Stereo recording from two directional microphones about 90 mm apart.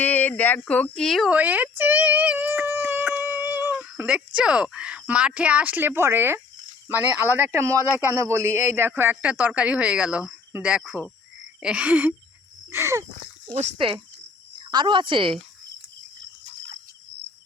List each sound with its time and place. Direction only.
0.0 s speech: 15° left (ahead or behind)
1.3 s a man's voice: 15° right (ahead or behind)
12.7 s speech: 30° right (ahead or behind)
13.5 s speech: 75° right (ahead or behind)
14.7 s speech: 60° right (ahead or behind)